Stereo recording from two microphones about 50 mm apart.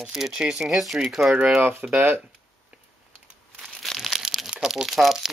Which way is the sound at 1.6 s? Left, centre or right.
Right.